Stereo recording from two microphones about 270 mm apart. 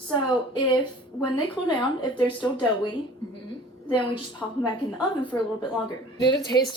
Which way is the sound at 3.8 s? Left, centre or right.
Centre.